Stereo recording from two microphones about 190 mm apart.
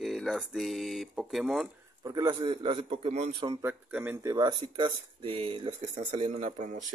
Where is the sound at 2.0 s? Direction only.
20° right (ahead or behind).